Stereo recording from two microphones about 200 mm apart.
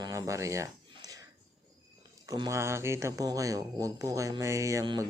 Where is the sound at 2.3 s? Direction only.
15° right (ahead or behind).